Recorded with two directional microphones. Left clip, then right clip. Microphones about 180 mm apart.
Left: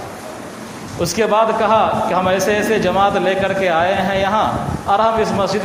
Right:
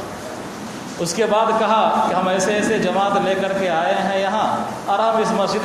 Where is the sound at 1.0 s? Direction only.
40° left (ahead or behind).